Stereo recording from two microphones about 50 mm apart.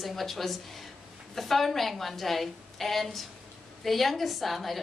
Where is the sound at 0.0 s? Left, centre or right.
Centre.